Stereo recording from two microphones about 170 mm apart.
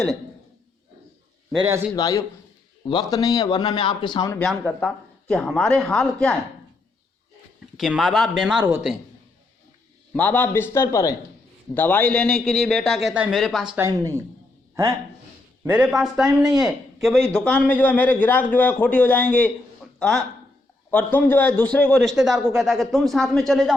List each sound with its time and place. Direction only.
1.6 s speech: 15° right (ahead or behind)
2.0 s a man's voice: 25° left (ahead or behind)
4.3 s a man's voice: 5° left (ahead or behind)
7.8 s a man's voice: centre (ahead or behind)
10.1 s a man's voice: 10° left (ahead or behind)
13.7 s speech: 15° right (ahead or behind)
15.6 s a man's voice: 10° right (ahead or behind)